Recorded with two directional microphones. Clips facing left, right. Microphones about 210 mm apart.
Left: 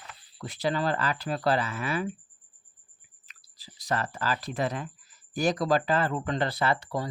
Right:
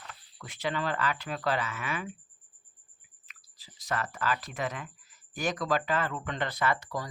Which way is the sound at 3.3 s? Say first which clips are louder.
Left 5 dB; 35° left (ahead or behind).